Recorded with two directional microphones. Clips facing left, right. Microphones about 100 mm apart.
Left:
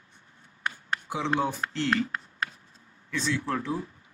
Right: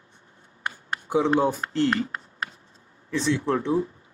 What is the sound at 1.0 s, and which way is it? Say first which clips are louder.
Speech: right 7 dB; 35° right (ahead or behind).